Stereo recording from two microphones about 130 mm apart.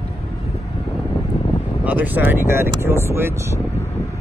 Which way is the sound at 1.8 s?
10° right (ahead or behind).